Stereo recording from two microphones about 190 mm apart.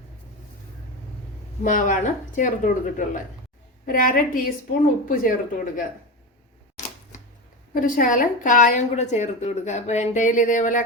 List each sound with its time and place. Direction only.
1.6 s speech: 45° left (ahead or behind)
7.7 s a woman's voice: 45° left (ahead or behind)